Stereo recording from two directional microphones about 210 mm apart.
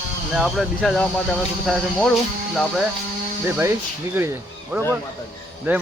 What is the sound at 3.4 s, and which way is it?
Speech, 10° right (ahead or behind).